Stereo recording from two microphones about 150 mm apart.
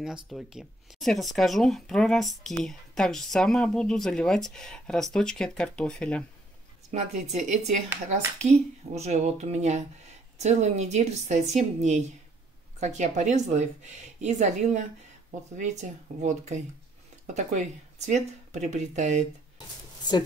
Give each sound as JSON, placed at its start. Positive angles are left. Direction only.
{"t": 0.0, "sound": "speech", "side_deg": 0}
{"t": 6.9, "sound": "speech", "side_deg": -50}